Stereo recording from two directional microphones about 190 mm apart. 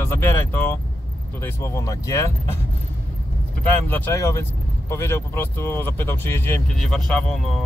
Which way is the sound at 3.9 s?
15° left (ahead or behind).